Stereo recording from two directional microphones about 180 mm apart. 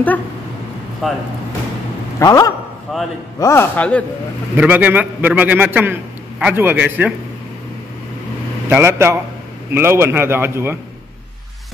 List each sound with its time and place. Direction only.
1.0 s speech: centre (ahead or behind)
2.1 s speech: 20° left (ahead or behind)
2.9 s speech: centre (ahead or behind)
3.3 s a man's voice: 15° left (ahead or behind)
4.6 s a man's voice: 10° right (ahead or behind)
8.6 s a man's voice: 15° right (ahead or behind)